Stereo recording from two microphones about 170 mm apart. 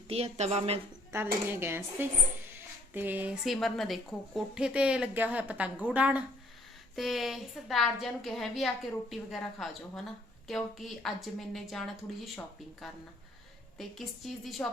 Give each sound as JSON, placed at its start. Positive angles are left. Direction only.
{"t": 0.1, "sound": "a woman's voice", "side_deg": -40}
{"t": 1.1, "sound": "a woman's voice", "side_deg": -15}